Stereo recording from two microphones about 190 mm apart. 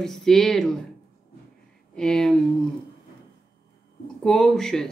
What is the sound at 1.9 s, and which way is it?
Speech, 5° left (ahead or behind).